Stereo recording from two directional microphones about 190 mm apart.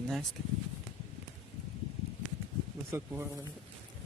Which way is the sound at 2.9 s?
15° right (ahead or behind).